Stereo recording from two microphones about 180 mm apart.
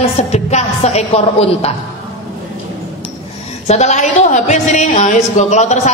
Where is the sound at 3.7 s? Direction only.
40° left (ahead or behind).